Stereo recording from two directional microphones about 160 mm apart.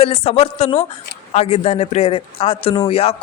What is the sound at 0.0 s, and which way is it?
Speech, 40° left (ahead or behind).